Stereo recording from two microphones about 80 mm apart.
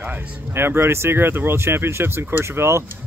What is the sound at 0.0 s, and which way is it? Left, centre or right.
Speech, right.